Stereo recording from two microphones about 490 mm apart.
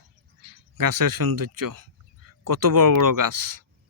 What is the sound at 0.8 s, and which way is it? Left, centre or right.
Speech, right.